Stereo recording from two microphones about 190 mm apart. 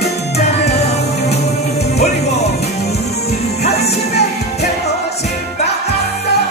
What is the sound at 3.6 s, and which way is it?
Music, 35° left (ahead or behind).